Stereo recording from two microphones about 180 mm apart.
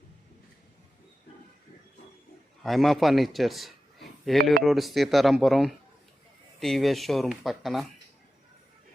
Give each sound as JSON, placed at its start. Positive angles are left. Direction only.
{"t": 2.6, "sound": "a man's voice", "side_deg": 0}